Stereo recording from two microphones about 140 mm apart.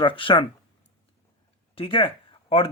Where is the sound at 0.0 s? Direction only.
40° left (ahead or behind).